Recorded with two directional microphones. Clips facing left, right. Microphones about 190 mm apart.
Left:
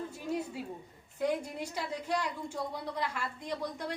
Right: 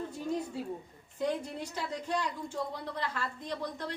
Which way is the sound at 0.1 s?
10° left (ahead or behind).